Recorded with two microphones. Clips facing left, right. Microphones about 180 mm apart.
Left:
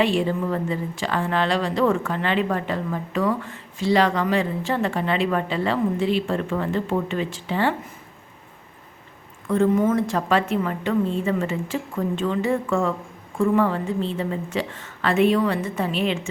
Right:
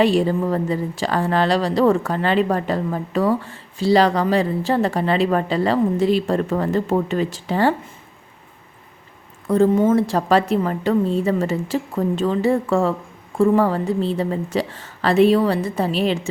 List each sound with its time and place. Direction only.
0.0 s a woman's voice: 40° right (ahead or behind)
9.5 s a woman's voice: 30° right (ahead or behind)